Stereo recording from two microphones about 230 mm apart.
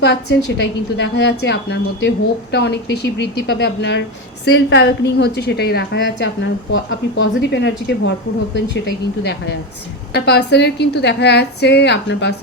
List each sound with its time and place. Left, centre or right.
0.0 s a woman's voice: left
10.2 s a woman's voice: left